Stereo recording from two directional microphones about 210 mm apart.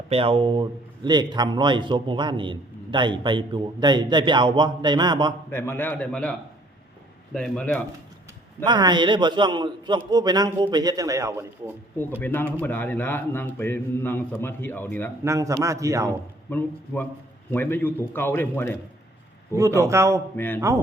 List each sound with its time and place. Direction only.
0.1 s a man's voice: 25° right (ahead or behind)
5.5 s a man's voice: 10° left (ahead or behind)
7.3 s speech: 5° left (ahead or behind)
8.6 s a man's voice: 20° right (ahead or behind)
11.9 s a man's voice: 10° left (ahead or behind)
15.2 s a man's voice: 15° right (ahead or behind)
16.5 s a man's voice: 10° left (ahead or behind)
19.5 s a man's voice: 15° right (ahead or behind)
20.3 s a man's voice: 10° left (ahead or behind)